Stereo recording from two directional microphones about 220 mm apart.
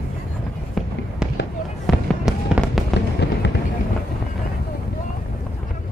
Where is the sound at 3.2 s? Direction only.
50° left (ahead or behind).